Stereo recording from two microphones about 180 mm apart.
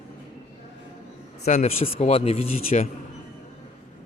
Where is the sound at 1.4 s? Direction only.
40° left (ahead or behind).